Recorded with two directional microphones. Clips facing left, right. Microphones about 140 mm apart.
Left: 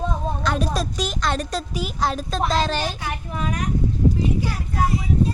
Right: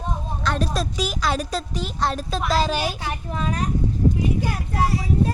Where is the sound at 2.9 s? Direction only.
30° right (ahead or behind).